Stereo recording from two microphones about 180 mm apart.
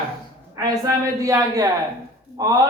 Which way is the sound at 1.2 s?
20° right (ahead or behind).